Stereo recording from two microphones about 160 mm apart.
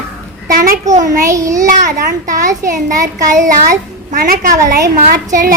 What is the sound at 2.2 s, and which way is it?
A child's voice, 55° right (ahead or behind).